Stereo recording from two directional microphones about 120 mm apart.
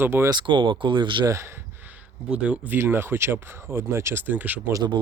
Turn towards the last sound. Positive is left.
turn(degrees=-15)  # may be behind; listen again after turning